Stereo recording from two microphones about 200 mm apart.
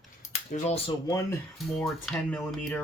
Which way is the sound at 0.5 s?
30° left (ahead or behind).